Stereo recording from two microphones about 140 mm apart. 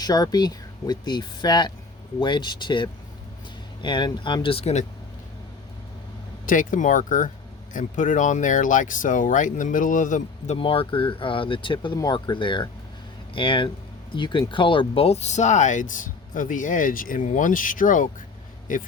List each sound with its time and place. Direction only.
0.0 s speech: 30° left (ahead or behind); by 4.9 s 50° left (ahead or behind)
6.4 s speech: 70° left (ahead or behind)
10.6 s speech: 40° left (ahead or behind); by 18.8 s 70° left (ahead or behind)